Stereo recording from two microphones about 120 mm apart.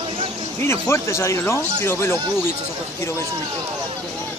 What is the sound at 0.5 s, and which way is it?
Speech, 20° left (ahead or behind).